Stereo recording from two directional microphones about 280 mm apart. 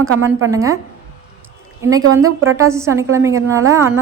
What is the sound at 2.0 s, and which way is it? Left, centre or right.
Speech, right.